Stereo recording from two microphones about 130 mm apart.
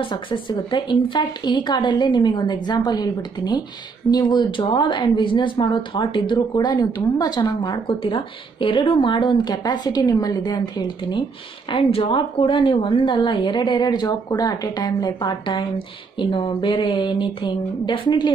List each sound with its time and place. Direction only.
0.0 s speech: 40° left (ahead or behind)